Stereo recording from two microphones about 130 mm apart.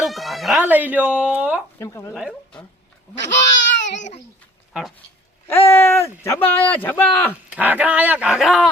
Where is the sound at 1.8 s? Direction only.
20° left (ahead or behind).